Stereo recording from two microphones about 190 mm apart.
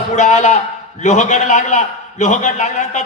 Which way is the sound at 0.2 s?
40° left (ahead or behind).